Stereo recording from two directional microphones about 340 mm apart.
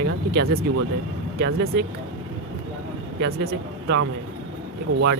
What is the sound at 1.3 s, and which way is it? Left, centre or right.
Speech, right.